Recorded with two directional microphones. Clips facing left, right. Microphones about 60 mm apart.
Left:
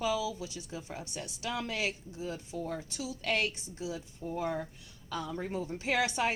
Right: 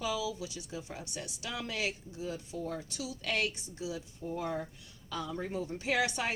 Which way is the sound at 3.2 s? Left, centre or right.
Left.